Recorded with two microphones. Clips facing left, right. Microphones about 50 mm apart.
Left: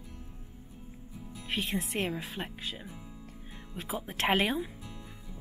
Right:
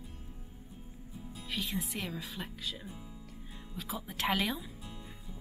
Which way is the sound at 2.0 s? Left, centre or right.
Left.